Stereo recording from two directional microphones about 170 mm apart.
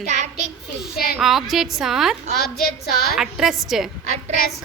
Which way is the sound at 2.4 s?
65° left (ahead or behind).